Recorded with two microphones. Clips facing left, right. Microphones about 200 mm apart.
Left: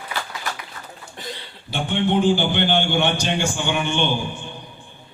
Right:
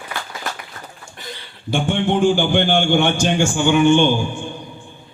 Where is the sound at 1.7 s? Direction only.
45° right (ahead or behind).